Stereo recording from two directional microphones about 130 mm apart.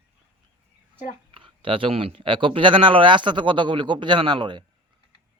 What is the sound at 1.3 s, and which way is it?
Speech, 40° right (ahead or behind).